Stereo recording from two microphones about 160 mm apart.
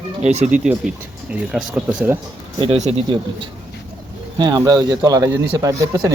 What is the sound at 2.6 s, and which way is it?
Speech, 40° right (ahead or behind).